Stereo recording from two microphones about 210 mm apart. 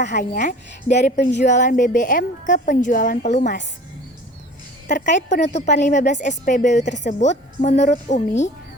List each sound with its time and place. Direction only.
0.0 s a woman's voice: 35° left (ahead or behind)
4.9 s a woman's voice: 35° left (ahead or behind)